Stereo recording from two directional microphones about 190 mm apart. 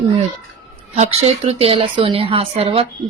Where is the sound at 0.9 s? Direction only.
35° right (ahead or behind).